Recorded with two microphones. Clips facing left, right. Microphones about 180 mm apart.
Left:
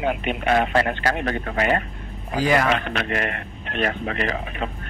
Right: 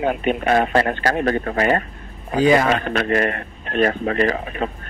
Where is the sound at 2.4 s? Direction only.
25° right (ahead or behind).